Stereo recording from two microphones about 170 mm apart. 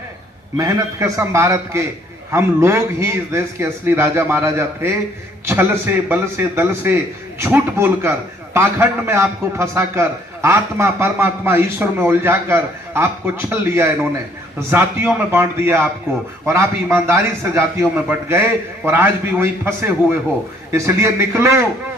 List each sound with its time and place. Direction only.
0.5 s a man's voice: 20° right (ahead or behind)